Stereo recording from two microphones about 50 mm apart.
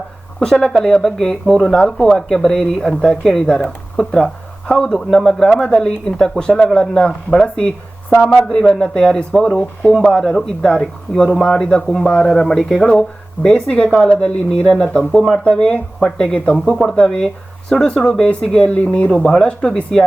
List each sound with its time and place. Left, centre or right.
0.3 s speech: centre; by 19.1 s left
19.1 s speech: centre